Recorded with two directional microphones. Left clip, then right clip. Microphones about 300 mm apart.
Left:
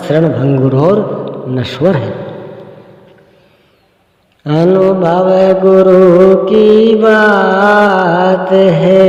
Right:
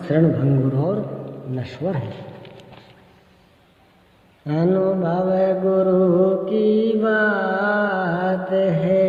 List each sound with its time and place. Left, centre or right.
0.0 s mantra: left
4.4 s mantra: left